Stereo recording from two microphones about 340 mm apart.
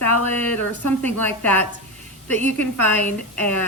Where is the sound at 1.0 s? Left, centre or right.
Centre.